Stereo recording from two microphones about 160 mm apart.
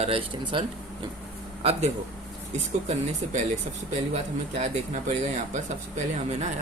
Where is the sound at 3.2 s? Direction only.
40° right (ahead or behind).